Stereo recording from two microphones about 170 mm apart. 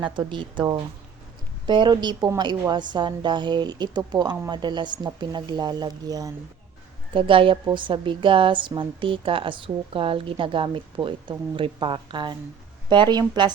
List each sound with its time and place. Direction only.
0.0 s a woman's voice: 30° right (ahead or behind)